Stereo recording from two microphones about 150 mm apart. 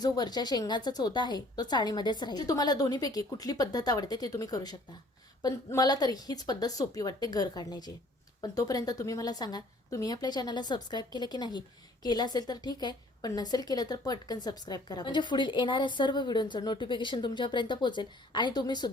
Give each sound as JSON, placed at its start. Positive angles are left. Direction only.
{"t": 0.0, "sound": "a woman's voice", "side_deg": 30}